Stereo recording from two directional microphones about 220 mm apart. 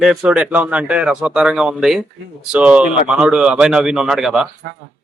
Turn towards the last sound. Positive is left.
turn(degrees=0)  # may be behind; listen again after turning